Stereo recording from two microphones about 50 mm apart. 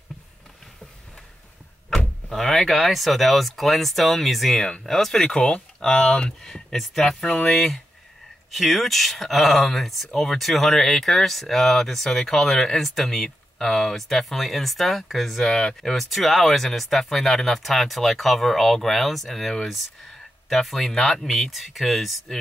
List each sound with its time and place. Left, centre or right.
1.9 s speech: centre
5.4 s speech: centre
6.5 s speech: centre